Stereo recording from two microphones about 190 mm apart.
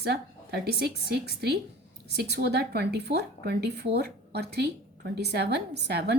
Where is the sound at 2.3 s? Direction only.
55° right (ahead or behind).